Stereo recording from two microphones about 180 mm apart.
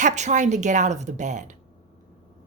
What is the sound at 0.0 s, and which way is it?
A woman's voice, 40° right (ahead or behind).